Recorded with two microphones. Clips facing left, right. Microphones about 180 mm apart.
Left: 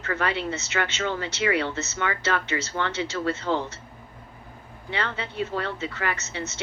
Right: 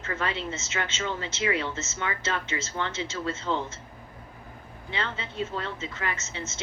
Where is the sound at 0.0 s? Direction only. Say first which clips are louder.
Left 4 dB; 70° left (ahead or behind).